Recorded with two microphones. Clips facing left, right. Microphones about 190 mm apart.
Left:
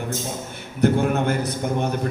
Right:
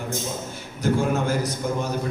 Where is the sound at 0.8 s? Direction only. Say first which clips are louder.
Left 3 dB; 60° left (ahead or behind).